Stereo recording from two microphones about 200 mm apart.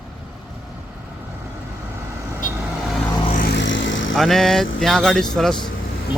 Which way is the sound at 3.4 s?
55° left (ahead or behind).